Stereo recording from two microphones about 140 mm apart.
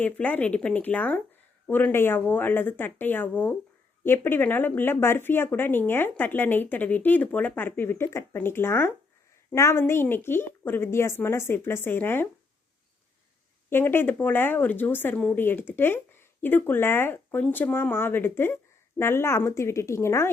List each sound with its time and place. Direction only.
0.0 s speech: 10° left (ahead or behind)
13.7 s speech: 15° left (ahead or behind)